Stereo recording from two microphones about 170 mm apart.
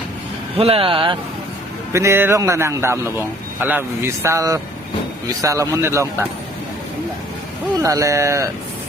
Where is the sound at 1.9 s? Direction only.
15° right (ahead or behind).